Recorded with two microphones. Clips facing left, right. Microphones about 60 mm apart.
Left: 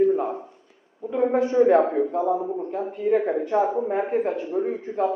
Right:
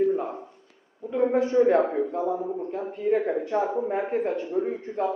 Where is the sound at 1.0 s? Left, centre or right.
Centre.